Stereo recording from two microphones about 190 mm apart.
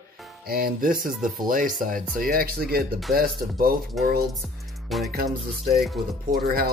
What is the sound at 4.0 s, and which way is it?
Music, centre (ahead or behind).